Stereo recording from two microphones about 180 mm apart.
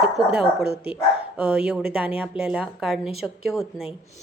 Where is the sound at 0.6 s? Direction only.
65° right (ahead or behind).